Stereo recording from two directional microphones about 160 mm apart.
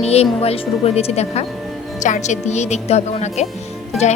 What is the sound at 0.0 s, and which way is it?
Speech, 40° left (ahead or behind).